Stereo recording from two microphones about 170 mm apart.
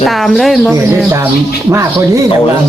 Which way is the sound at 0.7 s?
15° right (ahead or behind).